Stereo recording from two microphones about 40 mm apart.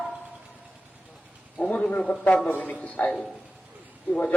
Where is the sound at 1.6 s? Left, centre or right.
Centre.